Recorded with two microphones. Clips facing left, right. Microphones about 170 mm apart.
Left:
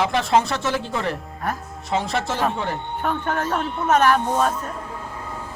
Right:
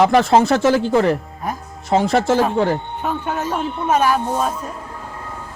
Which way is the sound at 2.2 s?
Centre (ahead or behind).